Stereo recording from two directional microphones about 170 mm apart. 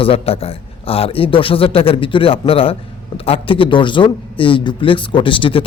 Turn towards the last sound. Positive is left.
turn(degrees=30)  # may be behind; listen again after turning